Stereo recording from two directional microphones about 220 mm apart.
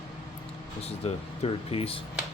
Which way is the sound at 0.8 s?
30° left (ahead or behind).